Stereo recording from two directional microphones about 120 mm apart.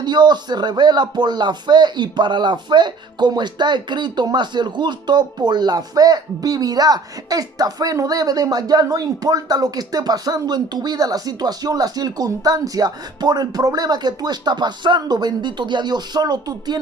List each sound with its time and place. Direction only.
0.0 s speech: 40° right (ahead or behind)